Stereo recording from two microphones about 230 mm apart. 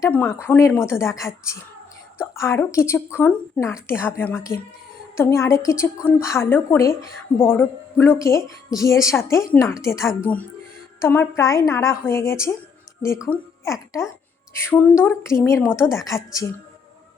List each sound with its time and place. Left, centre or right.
0.0 s a woman's voice: centre
2.3 s a woman's voice: centre